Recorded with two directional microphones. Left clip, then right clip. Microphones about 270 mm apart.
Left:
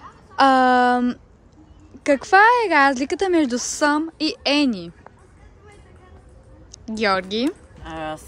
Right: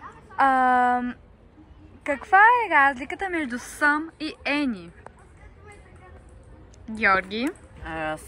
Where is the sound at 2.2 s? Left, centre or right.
Left.